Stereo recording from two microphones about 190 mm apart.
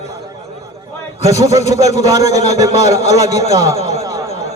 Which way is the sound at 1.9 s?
20° right (ahead or behind).